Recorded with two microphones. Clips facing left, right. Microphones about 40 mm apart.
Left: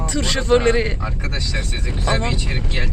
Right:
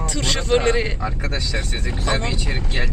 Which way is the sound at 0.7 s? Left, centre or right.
Centre.